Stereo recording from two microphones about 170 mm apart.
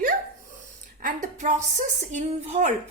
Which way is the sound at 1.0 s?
50° right (ahead or behind).